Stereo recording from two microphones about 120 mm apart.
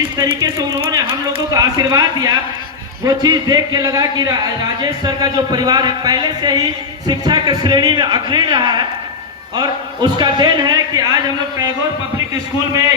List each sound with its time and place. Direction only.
0.3 s a man's voice: 35° right (ahead or behind)